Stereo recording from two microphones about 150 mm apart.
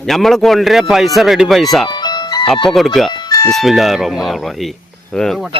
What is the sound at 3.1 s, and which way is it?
Music, 25° left (ahead or behind).